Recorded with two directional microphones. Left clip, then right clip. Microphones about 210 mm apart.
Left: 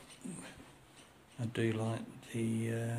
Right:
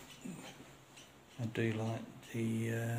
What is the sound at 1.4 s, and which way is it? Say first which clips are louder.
Speech: left 2 dB; 15° left (ahead or behind).